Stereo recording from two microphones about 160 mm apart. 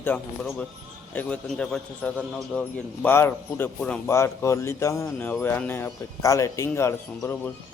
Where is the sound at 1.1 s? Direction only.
5° left (ahead or behind).